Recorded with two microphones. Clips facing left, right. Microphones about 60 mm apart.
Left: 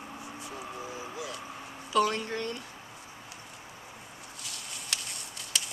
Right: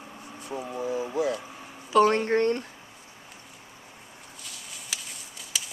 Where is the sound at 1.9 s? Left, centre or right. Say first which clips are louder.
Right 7 dB; right.